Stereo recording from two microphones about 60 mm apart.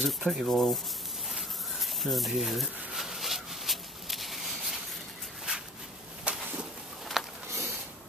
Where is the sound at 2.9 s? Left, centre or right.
Centre.